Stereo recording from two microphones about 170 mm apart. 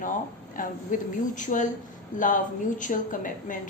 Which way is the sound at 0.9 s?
50° left (ahead or behind).